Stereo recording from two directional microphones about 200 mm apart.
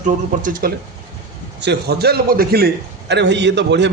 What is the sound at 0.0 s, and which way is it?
Speech, 40° right (ahead or behind).